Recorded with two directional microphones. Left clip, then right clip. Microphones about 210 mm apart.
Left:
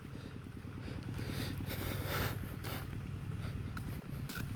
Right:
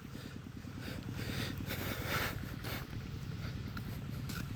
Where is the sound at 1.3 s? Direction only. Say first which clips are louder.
Right 2 dB; 5° left (ahead or behind).